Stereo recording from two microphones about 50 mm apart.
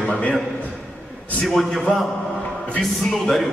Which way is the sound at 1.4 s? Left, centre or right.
Centre.